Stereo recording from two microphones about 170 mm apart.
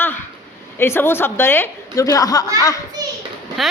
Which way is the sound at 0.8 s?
15° left (ahead or behind).